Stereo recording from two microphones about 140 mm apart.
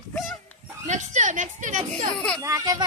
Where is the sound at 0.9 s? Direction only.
60° right (ahead or behind).